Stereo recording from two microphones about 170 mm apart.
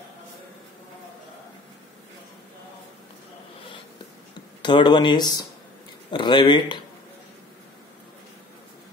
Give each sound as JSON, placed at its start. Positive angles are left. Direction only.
{"t": 4.6, "sound": "speech", "side_deg": 30}